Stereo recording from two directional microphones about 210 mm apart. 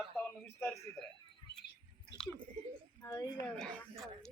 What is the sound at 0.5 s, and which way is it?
Speech, 10° left (ahead or behind).